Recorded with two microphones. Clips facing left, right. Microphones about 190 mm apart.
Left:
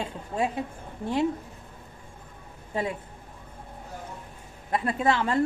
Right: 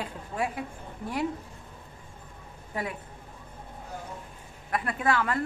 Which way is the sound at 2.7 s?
25° left (ahead or behind).